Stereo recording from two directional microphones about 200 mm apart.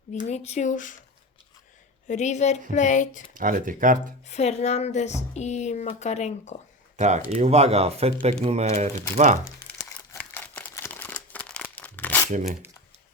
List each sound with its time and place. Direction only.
0.3 s speech: 35° left (ahead or behind)
2.0 s speech: 35° left (ahead or behind)
3.3 s speech: 40° right (ahead or behind)
4.3 s speech: 35° left (ahead or behind)
6.9 s speech: 35° right (ahead or behind)
9.4 s crumpling: 15° left (ahead or behind)